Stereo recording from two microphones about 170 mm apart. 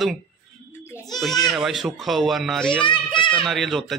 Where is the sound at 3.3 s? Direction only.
5° left (ahead or behind).